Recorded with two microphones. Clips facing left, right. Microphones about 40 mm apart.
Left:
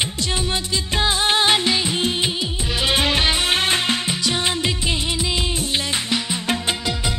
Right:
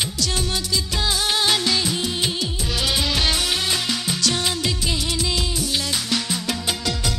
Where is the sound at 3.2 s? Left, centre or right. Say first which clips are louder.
Left 2 dB; left.